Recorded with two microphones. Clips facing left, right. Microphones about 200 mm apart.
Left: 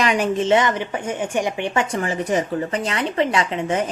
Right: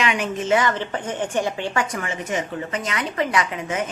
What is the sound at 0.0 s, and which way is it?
Speech, 35° left (ahead or behind).